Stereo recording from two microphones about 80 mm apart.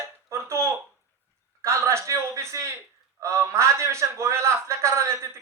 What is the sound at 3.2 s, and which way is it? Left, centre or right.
A man's voice, right.